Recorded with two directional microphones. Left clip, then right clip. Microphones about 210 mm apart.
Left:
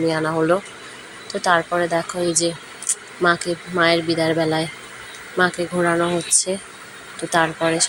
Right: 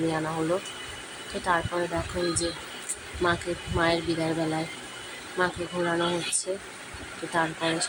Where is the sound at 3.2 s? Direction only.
15° left (ahead or behind).